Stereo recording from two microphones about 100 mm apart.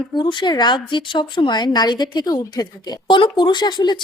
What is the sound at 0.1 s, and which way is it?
A woman's voice, 50° left (ahead or behind).